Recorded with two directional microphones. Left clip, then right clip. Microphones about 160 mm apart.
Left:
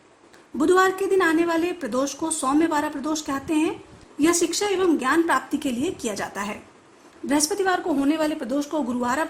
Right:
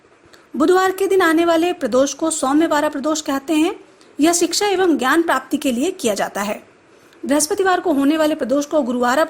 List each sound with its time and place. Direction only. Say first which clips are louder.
0.5 s a woman's voice: right 4 dB; 35° right (ahead or behind)